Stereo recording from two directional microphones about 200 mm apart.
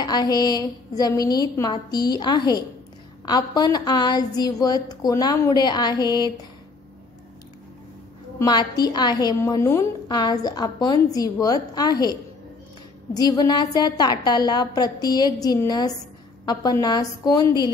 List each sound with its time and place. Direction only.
0.0 s a woman's voice: 20° left (ahead or behind)
8.4 s a woman's voice: 20° left (ahead or behind)